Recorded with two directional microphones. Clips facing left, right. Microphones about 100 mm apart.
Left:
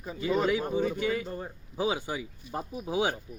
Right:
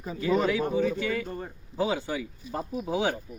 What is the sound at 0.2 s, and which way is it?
A man's voice, 10° left (ahead or behind).